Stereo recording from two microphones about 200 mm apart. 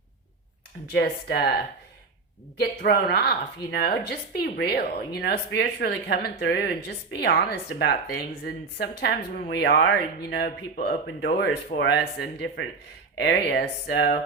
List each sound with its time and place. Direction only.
0.9 s speech: 50° left (ahead or behind)
2.6 s a woman's voice: 50° left (ahead or behind)